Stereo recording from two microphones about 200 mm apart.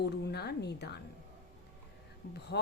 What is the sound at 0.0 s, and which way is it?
Speech, 55° left (ahead or behind).